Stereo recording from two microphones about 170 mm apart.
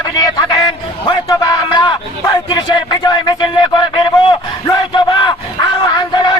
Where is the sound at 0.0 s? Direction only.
20° left (ahead or behind).